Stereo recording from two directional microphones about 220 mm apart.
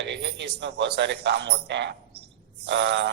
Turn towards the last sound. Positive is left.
turn(degrees=-50)  # may be behind; listen again after turning